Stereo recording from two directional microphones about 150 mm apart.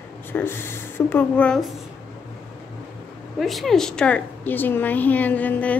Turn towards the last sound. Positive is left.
turn(degrees=10)  # may be behind; listen again after turning